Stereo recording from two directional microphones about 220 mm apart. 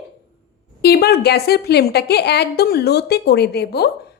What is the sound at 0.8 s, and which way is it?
A woman's voice, 45° left (ahead or behind).